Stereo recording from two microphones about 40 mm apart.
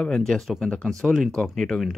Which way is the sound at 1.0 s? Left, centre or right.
Right.